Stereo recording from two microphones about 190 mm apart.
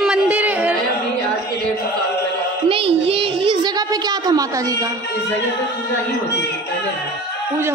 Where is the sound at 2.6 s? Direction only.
30° right (ahead or behind).